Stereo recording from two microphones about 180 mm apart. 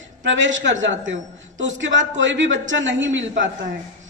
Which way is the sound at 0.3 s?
90° right.